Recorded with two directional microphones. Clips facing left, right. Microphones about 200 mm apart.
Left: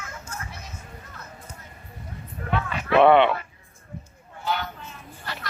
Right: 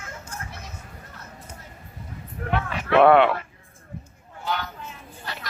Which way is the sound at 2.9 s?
Centre (ahead or behind).